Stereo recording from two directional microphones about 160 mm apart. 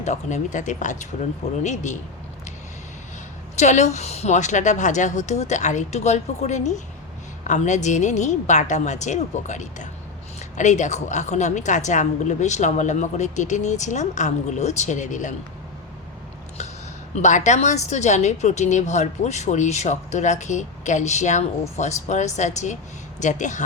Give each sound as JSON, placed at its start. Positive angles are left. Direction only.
{"t": 0.0, "sound": "a woman's voice", "side_deg": 45}
{"t": 3.5, "sound": "a woman's voice", "side_deg": 45}
{"t": 17.2, "sound": "a woman's voice", "side_deg": 50}